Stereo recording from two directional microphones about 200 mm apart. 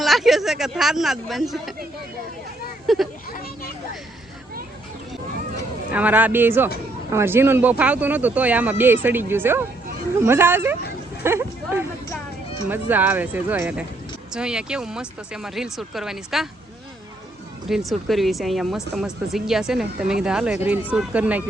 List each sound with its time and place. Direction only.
0.0 s speech: centre (ahead or behind)
2.8 s speech: centre (ahead or behind)
3.3 s speech: 50° left (ahead or behind)
5.9 s speech: 10° right (ahead or behind)
17.7 s speech: centre (ahead or behind)